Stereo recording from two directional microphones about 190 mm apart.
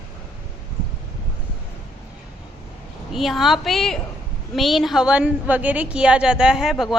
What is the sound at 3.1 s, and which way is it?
A woman's voice, centre (ahead or behind).